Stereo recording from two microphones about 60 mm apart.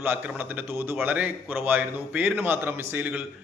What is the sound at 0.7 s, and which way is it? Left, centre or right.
A man's voice, right.